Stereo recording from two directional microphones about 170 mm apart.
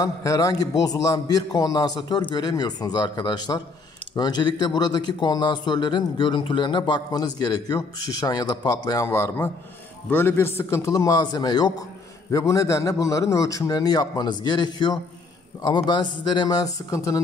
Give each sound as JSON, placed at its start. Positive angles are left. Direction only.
{"t": 0.0, "sound": "a man's voice", "side_deg": 20}